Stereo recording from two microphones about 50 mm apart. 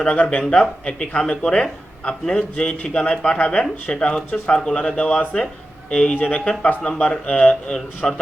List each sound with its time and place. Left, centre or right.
0.0 s speech: left